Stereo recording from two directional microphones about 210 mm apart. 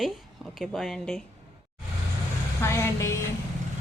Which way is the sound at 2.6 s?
15° left (ahead or behind).